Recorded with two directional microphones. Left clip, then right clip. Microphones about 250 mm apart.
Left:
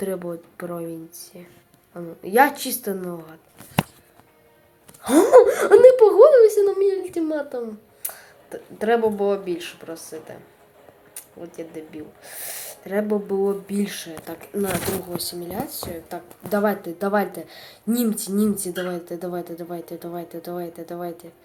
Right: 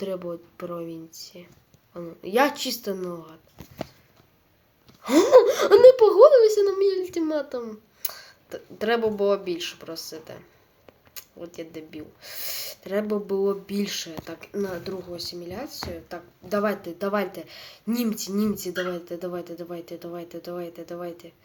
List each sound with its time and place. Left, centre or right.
0.0 s a child's voice: centre
5.3 s a child's voice: centre